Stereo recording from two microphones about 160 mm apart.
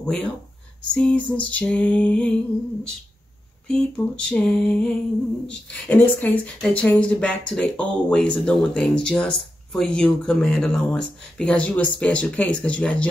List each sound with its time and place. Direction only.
0.0 s speech: 5° left (ahead or behind)
3.6 s a sound: 5° left (ahead or behind)
5.5 s speech: 10° left (ahead or behind)